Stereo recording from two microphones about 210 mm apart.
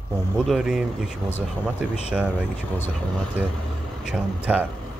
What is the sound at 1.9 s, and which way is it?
Speech, 5° right (ahead or behind).